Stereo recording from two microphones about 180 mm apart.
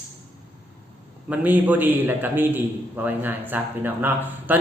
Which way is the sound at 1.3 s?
10° right (ahead or behind).